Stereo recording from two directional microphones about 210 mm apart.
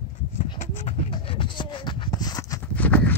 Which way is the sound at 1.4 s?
20° left (ahead or behind).